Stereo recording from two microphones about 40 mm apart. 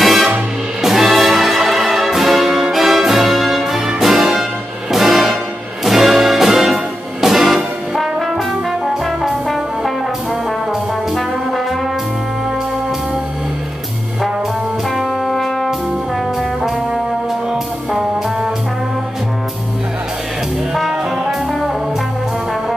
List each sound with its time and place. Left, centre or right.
0.0 s music: centre
9.0 s brass instrument: centre
10.7 s brass instrument: centre
15.2 s brass instrument: centre
17.5 s music: centre
20.7 s music: centre